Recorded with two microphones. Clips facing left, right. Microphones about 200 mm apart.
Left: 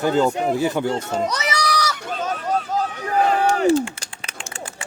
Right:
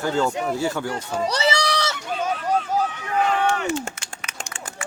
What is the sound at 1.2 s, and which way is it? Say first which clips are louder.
Speech: right 2 dB; 30° right (ahead or behind).